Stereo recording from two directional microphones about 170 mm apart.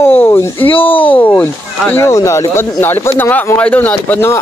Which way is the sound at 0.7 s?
30° left (ahead or behind).